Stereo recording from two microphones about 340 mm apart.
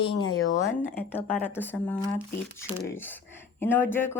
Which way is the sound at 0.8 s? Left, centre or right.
Centre.